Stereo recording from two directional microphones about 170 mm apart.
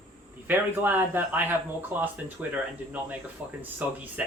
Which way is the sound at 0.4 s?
10° right (ahead or behind).